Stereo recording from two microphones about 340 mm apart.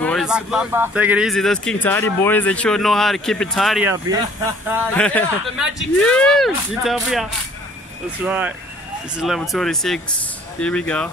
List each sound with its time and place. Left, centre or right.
0.0 s speech: centre